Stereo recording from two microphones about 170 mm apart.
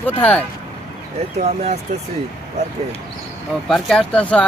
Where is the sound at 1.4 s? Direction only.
40° right (ahead or behind).